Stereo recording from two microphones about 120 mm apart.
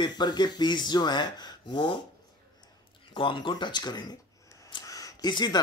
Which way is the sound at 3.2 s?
45° left (ahead or behind).